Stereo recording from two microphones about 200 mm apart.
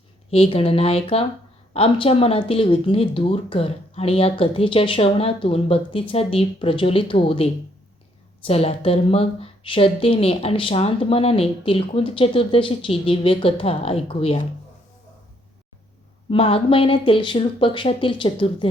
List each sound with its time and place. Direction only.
0.3 s a woman's voice: 30° left (ahead or behind)
16.3 s a woman's voice: 25° left (ahead or behind)